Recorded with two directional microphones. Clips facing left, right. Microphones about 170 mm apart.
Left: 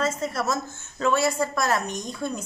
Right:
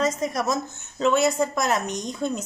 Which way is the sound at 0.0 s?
15° right (ahead or behind).